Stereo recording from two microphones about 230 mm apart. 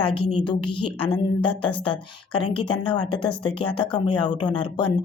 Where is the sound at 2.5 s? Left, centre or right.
Centre.